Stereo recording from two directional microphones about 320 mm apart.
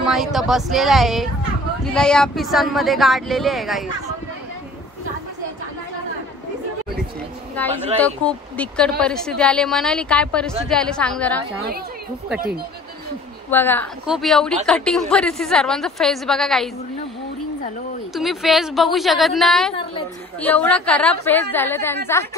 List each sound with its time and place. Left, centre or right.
0.0 s speech: centre
7.6 s speech: centre
12.4 s speech: right
13.5 s speech: centre
18.1 s speech: centre